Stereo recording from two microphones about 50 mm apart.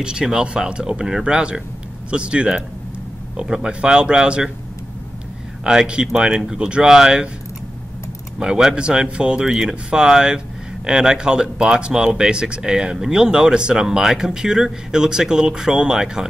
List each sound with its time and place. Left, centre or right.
0.0 s speech: centre
5.6 s speech: centre
8.4 s speech: centre